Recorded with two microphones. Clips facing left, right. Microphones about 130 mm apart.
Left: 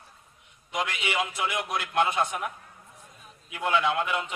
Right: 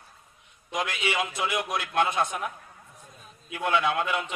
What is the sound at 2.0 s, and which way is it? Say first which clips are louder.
Speech: even; 10° left (ahead or behind).